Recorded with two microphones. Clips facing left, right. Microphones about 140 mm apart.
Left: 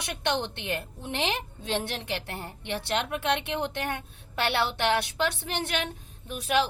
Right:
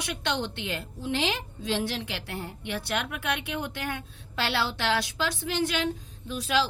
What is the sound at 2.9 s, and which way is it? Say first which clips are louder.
A woman's voice: left 4 dB; 25° left (ahead or behind).